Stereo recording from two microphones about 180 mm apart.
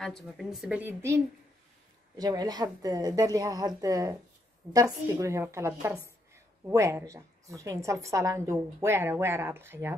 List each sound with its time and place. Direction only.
0.0 s a woman's voice: centre (ahead or behind)